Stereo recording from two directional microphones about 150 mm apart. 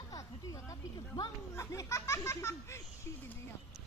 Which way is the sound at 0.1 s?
20° left (ahead or behind).